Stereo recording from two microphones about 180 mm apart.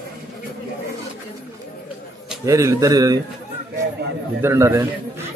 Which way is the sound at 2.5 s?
15° right (ahead or behind).